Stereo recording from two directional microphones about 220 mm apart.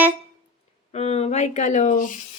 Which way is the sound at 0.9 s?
30° left (ahead or behind).